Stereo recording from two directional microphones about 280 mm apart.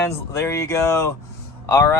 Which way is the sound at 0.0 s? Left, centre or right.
Centre.